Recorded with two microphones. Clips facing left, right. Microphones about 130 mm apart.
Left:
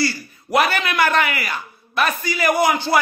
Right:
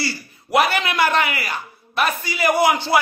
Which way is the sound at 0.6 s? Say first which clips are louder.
Even; 25° right (ahead or behind).